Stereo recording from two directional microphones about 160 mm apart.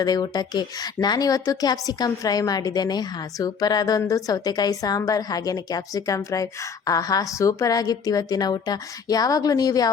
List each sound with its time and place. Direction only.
0.0 s a woman's voice: 25° left (ahead or behind)